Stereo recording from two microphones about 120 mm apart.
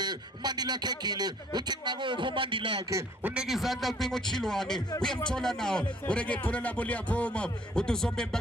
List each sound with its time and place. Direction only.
0.0 s speech: 35° right (ahead or behind)
3.3 s a man's voice: centre (ahead or behind)